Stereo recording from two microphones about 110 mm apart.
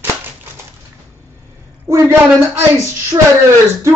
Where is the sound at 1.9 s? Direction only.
25° right (ahead or behind).